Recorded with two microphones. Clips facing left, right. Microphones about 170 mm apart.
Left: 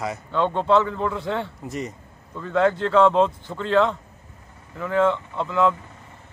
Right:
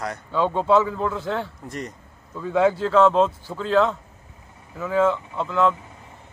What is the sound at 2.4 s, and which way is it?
Speech, 10° right (ahead or behind).